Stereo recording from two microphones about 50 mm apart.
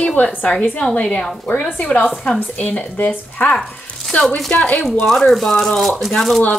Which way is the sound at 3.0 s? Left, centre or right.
Left.